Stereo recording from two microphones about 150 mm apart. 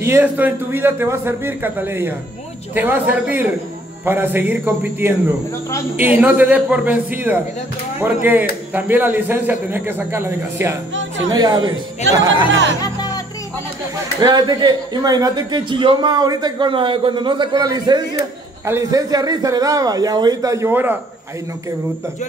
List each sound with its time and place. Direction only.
0.0 s speech: 15° right (ahead or behind)
11.3 s speech: 30° right (ahead or behind)
12.8 s music: 25° left (ahead or behind)
14.2 s speech: 30° right (ahead or behind)